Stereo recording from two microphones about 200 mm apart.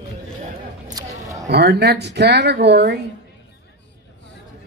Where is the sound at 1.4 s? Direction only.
55° right (ahead or behind).